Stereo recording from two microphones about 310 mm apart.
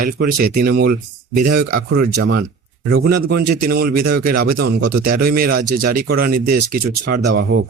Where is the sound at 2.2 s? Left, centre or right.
Right.